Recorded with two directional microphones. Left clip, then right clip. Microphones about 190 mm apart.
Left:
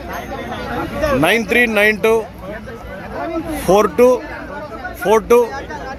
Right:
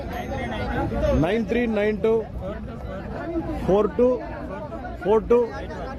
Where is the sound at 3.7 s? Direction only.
15° left (ahead or behind).